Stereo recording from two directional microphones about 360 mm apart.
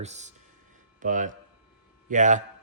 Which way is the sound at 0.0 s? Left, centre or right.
Centre.